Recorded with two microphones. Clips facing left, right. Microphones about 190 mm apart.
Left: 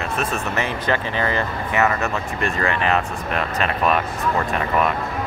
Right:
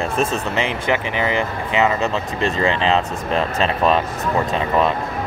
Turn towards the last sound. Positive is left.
turn(degrees=-25)  # may be behind; listen again after turning